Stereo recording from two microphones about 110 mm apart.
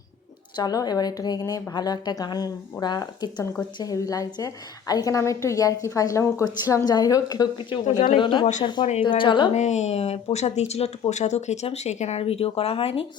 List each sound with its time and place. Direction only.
0.5 s speech: 35° left (ahead or behind)
7.9 s speech: 90° left
8.2 s speech: 45° left (ahead or behind)
9.5 s speech: 90° left; by 13.1 s 60° left (ahead or behind)